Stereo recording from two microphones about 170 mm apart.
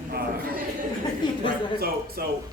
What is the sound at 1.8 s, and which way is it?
Speech, 65° right (ahead or behind).